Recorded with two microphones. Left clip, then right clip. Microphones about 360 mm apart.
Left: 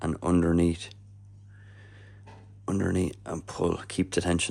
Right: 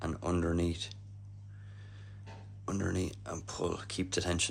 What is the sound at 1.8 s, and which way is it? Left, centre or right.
Neigh, centre.